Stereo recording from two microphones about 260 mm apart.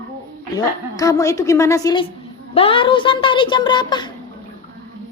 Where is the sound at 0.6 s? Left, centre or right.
Centre.